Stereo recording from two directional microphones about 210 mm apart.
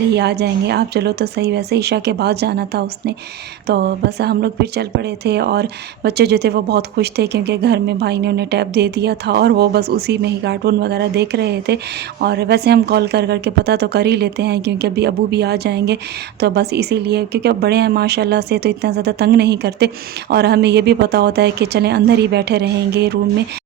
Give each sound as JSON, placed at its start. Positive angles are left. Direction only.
{"t": 0.1, "sound": "a woman's voice", "side_deg": -50}